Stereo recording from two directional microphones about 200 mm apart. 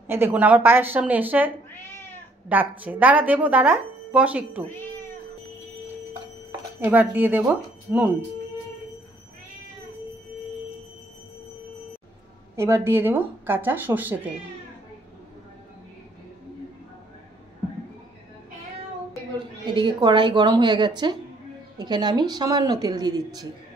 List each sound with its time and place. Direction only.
0.0 s speech: 10° right (ahead or behind)
1.7 s cat: 10° left (ahead or behind)
2.5 s speech: 10° right (ahead or behind)
6.8 s speech: 10° right (ahead or behind)
12.5 s speech: 15° right (ahead or behind)
19.1 s a woman's voice: 25° right (ahead or behind)